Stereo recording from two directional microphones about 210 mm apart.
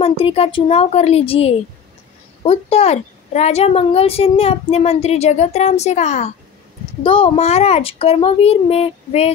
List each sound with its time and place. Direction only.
0.0 s a child's voice: 25° left (ahead or behind)